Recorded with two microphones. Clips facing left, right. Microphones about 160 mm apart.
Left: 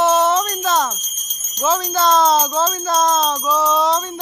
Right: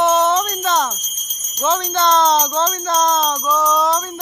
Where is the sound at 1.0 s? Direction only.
10° right (ahead or behind).